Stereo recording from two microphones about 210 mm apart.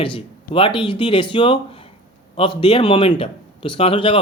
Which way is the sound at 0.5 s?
25° left (ahead or behind).